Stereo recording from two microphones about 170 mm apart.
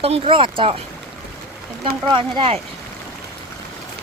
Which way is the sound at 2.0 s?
30° right (ahead or behind).